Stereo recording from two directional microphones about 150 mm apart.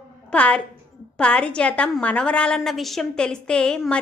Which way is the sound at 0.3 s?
10° left (ahead or behind).